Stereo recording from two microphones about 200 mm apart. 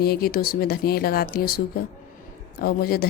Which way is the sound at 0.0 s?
50° left (ahead or behind).